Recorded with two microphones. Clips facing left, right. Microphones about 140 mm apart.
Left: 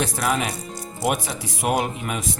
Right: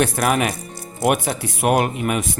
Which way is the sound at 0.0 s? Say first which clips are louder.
Right 5 dB; 60° right (ahead or behind).